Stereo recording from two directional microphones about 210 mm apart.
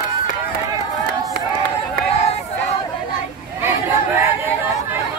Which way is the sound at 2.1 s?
30° left (ahead or behind).